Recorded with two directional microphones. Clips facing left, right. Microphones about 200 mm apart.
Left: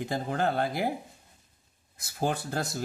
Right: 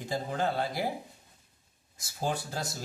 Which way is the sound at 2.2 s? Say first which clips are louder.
Left 3 dB; 60° left (ahead or behind).